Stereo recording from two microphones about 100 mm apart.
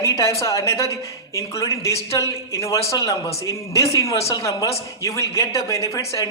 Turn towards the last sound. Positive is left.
turn(degrees=30)  # may be behind; listen again after turning